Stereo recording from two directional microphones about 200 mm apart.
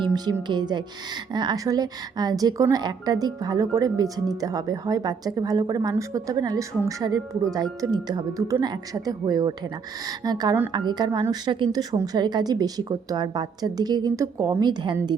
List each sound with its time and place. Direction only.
0.0 s a woman's voice: 20° right (ahead or behind)